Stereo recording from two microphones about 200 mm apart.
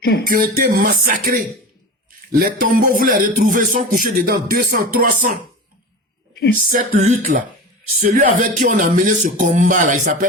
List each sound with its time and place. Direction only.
0.0 s speech: 50° left (ahead or behind)
0.3 s speech: 45° right (ahead or behind)
6.6 s speech: 40° right (ahead or behind)